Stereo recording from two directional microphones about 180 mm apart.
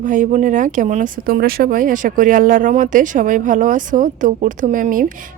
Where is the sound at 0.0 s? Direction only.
45° right (ahead or behind).